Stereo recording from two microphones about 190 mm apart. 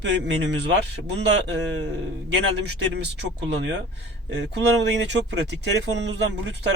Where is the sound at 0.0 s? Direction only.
65° right (ahead or behind).